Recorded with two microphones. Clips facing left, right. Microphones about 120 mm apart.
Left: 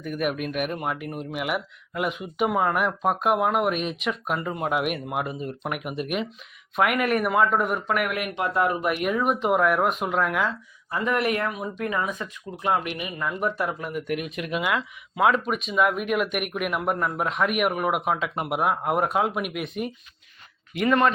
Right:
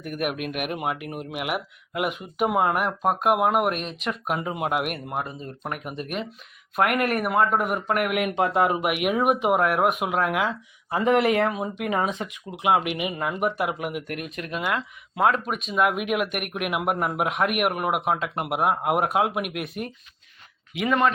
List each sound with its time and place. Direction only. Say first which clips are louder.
0.2 s speech: left 1 dB; 5° right (ahead or behind)
5.2 s speech: left 3 dB; 10° left (ahead or behind); by 7.8 s 5° right (ahead or behind)
8.2 s speech: right 3 dB; 25° right (ahead or behind); by 10.5 s 5° right (ahead or behind)
11.1 s speech: right 5 dB; 90° right
11.4 s speech: right 2 dB; 30° right (ahead or behind); by 13.7 s 15° right (ahead or behind)
14.1 s speech: left 4 dB; centre (ahead or behind)